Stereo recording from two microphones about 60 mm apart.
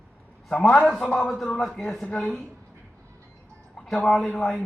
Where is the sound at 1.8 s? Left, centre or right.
Centre.